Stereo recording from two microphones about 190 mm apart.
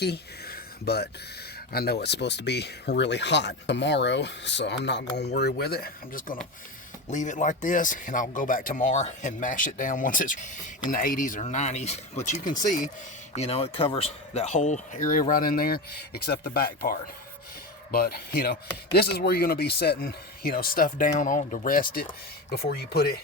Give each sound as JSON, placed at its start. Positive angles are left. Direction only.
{"t": 0.0, "sound": "a sound", "side_deg": 55}
{"t": 1.7, "sound": "speech", "side_deg": 55}
{"t": 7.1, "sound": "speech", "side_deg": 40}